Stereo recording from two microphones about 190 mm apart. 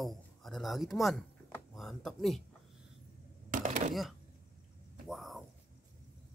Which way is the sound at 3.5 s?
45° right (ahead or behind).